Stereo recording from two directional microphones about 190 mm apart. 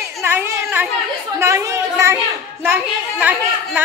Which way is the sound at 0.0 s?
10° right (ahead or behind).